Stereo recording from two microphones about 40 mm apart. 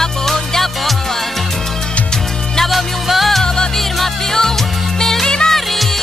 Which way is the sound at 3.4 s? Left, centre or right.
Centre.